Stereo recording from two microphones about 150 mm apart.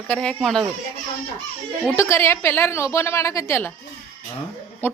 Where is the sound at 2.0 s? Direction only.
15° left (ahead or behind).